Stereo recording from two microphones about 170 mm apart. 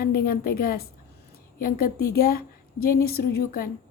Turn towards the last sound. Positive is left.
turn(degrees=60)  # may be behind; listen again after turning